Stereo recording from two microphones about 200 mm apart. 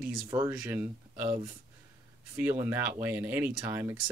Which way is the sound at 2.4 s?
10° right (ahead or behind).